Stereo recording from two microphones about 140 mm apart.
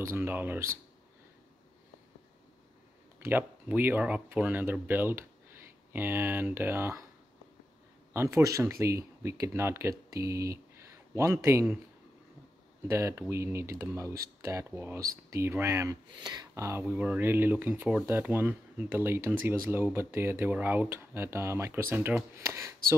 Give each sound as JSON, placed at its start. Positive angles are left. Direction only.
{"t": 0.0, "sound": "speech", "side_deg": -15}
{"t": 3.3, "sound": "speech", "side_deg": -15}
{"t": 8.1, "sound": "speech", "side_deg": -20}
{"t": 12.8, "sound": "speech", "side_deg": -20}